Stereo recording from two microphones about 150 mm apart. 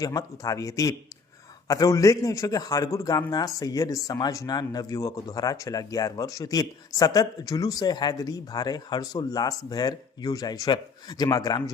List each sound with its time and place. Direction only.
0.0 s a man's voice: 25° left (ahead or behind)